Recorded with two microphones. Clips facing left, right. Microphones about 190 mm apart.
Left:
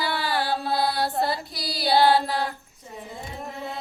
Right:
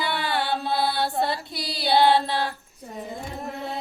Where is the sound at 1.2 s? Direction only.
25° right (ahead or behind).